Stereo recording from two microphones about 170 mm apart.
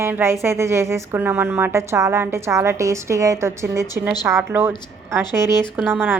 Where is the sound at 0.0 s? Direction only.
15° right (ahead or behind).